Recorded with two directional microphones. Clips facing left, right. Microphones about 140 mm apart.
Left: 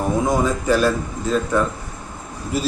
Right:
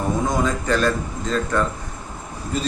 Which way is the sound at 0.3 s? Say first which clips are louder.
Left 3 dB; 10° left (ahead or behind).